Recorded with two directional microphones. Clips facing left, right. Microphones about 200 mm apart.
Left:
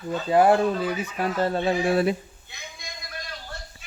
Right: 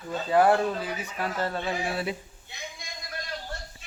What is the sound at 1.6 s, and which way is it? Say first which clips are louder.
Speech: left 8 dB; 45° left (ahead or behind).